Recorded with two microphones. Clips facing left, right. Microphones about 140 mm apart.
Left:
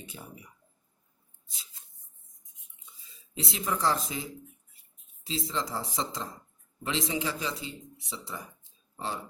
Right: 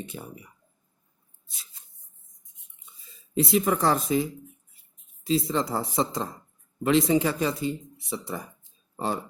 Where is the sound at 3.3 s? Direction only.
55° right (ahead or behind).